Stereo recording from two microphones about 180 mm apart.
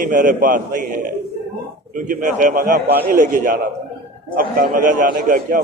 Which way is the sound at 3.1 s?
45° right (ahead or behind).